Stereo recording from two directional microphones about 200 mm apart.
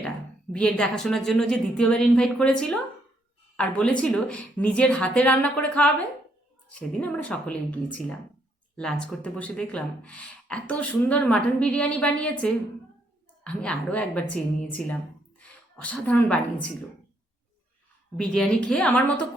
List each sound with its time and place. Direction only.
0.5 s a woman's voice: 5° left (ahead or behind)
15.4 s a woman's voice: 5° left (ahead or behind)
18.2 s speech: 5° left (ahead or behind)